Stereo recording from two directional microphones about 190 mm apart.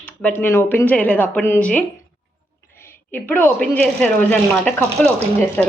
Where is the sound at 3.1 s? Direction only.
10° left (ahead or behind).